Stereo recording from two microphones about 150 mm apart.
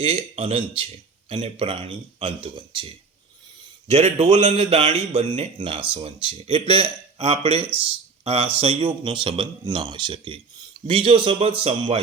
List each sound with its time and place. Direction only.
0.0 s speech: 35° right (ahead or behind)
3.8 s speech: 45° right (ahead or behind)